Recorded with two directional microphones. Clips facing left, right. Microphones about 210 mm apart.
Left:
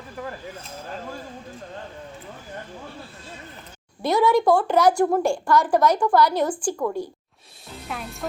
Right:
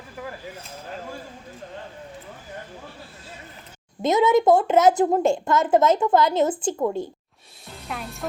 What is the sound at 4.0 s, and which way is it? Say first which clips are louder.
A woman's voice: right 1 dB; 20° right (ahead or behind).